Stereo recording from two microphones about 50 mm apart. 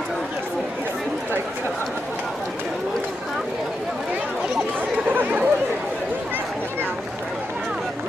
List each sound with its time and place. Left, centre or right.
5.1 s chatter: right